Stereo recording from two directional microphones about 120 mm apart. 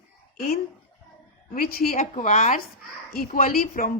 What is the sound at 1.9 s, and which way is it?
Speech, 90° left.